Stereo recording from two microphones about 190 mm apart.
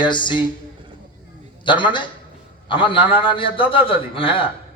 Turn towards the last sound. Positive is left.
turn(degrees=30)  # may be behind; listen again after turning